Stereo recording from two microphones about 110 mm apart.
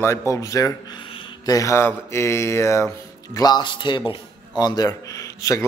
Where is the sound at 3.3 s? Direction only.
35° left (ahead or behind).